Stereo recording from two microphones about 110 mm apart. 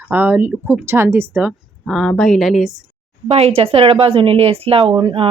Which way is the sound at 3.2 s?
65° right (ahead or behind).